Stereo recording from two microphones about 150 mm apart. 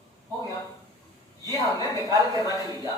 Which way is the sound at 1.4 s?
25° left (ahead or behind).